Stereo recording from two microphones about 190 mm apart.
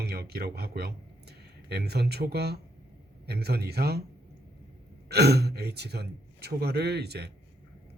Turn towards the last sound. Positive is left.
turn(degrees=-60)  # may be behind; listen again after turning